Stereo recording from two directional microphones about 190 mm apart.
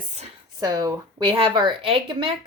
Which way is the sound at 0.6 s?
20° right (ahead or behind).